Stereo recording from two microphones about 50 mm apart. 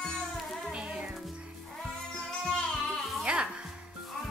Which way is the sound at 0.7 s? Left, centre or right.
Right.